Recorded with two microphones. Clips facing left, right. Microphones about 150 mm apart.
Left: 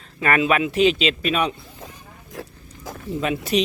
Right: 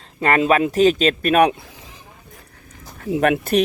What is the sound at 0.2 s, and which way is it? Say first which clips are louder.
A man's voice: right 3 dB; 35° right (ahead or behind).